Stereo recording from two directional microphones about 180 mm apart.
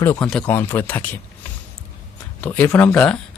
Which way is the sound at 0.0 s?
15° left (ahead or behind).